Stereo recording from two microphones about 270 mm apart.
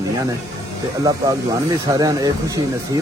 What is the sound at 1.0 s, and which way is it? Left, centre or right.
Speech, centre.